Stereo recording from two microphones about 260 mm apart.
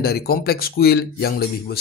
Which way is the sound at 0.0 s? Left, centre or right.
Left.